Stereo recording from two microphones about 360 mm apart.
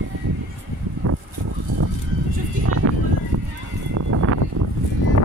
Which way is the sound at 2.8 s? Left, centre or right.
Right.